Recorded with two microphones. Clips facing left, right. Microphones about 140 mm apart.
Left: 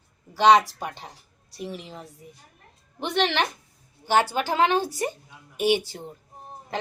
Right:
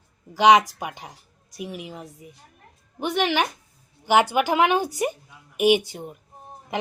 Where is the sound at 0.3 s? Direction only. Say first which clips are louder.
Right 1 dB; 15° right (ahead or behind).